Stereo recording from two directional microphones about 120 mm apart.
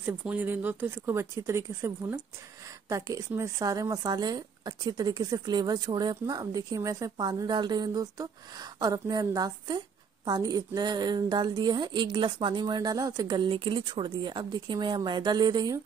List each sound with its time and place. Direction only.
0.0 s speech: 15° right (ahead or behind); by 13.4 s 30° right (ahead or behind)
13.5 s speech: 45° right (ahead or behind)